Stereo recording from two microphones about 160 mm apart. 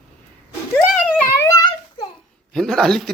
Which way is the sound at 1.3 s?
20° left (ahead or behind).